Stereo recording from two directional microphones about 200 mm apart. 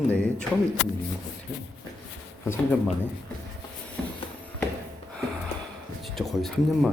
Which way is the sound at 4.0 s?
5° left (ahead or behind).